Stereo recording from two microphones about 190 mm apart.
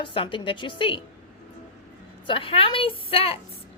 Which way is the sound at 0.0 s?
25° left (ahead or behind).